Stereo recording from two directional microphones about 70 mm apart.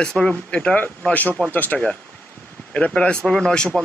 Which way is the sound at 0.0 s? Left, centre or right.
Centre.